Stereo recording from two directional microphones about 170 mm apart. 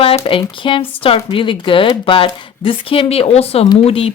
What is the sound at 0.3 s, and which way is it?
Speech, 30° left (ahead or behind).